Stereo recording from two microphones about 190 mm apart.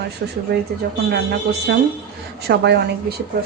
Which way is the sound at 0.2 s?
60° right (ahead or behind).